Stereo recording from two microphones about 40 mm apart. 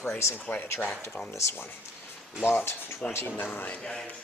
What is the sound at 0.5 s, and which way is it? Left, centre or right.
Speech, left.